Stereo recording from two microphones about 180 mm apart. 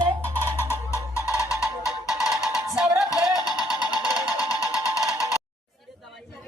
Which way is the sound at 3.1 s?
20° left (ahead or behind).